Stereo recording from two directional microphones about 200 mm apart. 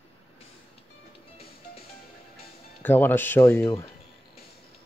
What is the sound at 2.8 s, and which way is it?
Speech, 10° left (ahead or behind).